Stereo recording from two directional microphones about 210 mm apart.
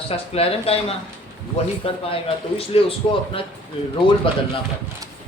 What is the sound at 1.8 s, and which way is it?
Speech, 25° left (ahead or behind).